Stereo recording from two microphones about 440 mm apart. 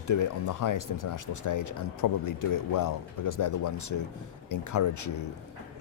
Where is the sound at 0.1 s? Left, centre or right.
Left.